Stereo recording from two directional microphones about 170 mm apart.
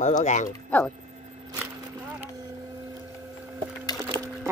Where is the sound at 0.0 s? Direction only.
45° left (ahead or behind).